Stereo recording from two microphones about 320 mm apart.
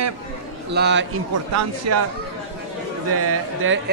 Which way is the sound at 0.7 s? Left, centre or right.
Right.